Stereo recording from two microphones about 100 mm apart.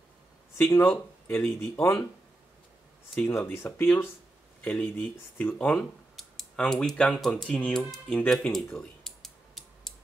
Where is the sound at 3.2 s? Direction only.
25° left (ahead or behind).